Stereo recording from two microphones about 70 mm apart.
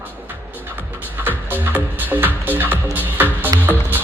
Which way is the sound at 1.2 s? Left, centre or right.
Right.